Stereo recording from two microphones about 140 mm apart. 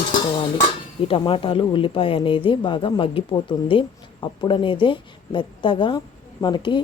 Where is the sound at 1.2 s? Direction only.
35° left (ahead or behind).